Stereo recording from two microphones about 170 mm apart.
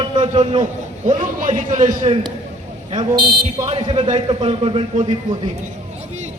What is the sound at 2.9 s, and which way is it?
A man's voice, 35° right (ahead or behind).